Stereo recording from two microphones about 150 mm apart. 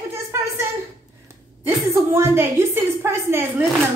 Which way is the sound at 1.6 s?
15° right (ahead or behind).